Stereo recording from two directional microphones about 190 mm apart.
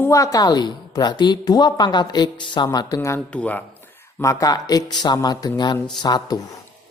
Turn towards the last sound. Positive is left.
turn(degrees=20)  # may be behind; listen again after turning